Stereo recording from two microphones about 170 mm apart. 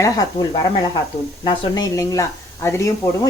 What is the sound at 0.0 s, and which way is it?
Speech, 20° left (ahead or behind).